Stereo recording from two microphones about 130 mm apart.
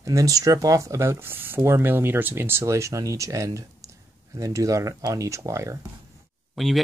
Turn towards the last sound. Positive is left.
turn(degrees=0)  # may be behind; listen again after turning